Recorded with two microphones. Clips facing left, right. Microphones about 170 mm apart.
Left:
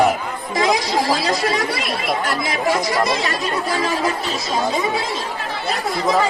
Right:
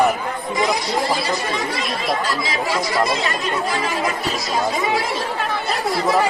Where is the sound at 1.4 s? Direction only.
75° left (ahead or behind).